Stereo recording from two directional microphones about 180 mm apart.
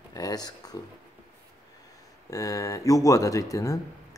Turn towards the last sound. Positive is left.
turn(degrees=20)  # may be behind; listen again after turning